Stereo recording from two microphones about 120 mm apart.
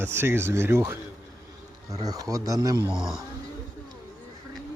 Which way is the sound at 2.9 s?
Centre (ahead or behind).